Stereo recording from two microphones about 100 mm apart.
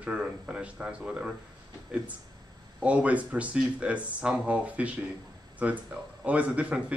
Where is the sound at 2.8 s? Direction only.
15° right (ahead or behind).